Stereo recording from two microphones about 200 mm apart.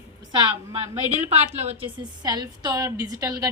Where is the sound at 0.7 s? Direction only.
30° right (ahead or behind).